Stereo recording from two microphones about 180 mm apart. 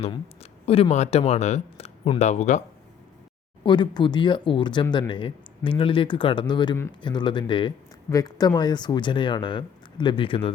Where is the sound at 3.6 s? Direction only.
25° left (ahead or behind).